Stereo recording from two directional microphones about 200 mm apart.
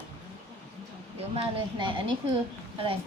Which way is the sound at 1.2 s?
25° right (ahead or behind).